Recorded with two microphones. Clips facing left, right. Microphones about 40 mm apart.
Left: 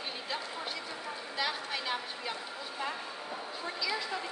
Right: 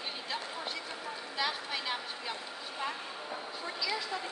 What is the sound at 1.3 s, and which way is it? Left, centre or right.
Speech, centre.